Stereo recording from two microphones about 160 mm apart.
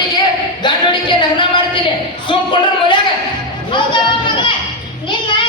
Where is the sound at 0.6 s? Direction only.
30° left (ahead or behind).